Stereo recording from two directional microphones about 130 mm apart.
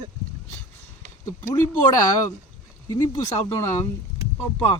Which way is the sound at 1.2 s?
25° left (ahead or behind).